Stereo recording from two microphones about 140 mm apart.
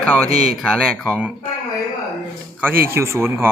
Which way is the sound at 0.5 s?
Centre (ahead or behind).